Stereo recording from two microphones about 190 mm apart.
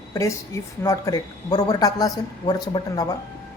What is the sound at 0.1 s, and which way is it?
A woman's voice, 15° left (ahead or behind).